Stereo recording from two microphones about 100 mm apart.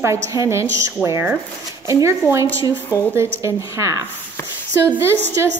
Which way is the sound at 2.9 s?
20° right (ahead or behind).